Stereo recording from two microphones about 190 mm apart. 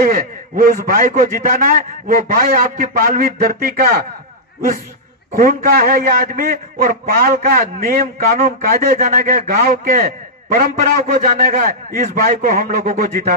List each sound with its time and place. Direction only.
0.0 s a man's voice: 50° right (ahead or behind)
5.4 s a man's voice: 50° right (ahead or behind)